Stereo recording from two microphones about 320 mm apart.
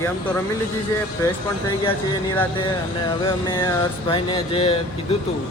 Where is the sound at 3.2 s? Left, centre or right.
Centre.